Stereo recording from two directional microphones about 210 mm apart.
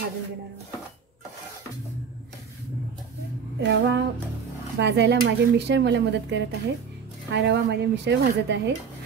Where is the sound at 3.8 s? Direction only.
55° right (ahead or behind).